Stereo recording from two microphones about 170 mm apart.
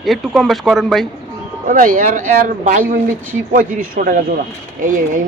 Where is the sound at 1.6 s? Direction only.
55° right (ahead or behind).